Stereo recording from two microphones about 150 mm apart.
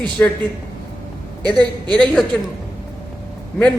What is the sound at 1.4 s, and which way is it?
Speech, 30° right (ahead or behind).